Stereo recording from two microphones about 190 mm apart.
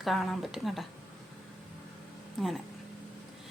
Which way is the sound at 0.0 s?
Centre (ahead or behind).